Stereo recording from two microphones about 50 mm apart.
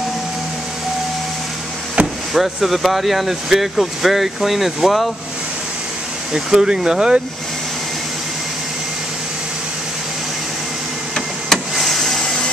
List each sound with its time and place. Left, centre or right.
2.0 s vehicle: right
2.3 s speech: centre
6.3 s speech: centre
11.7 s vehicle: centre